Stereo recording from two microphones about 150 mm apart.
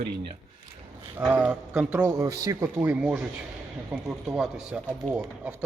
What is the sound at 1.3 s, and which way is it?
Speech, 5° right (ahead or behind).